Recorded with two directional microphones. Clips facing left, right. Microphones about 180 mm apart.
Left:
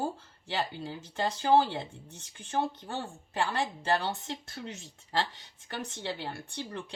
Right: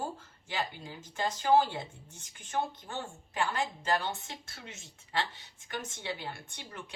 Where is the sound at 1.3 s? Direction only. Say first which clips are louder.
Left 1 dB; 35° left (ahead or behind).